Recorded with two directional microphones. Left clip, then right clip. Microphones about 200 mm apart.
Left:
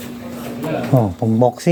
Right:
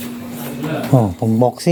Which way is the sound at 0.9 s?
5° right (ahead or behind).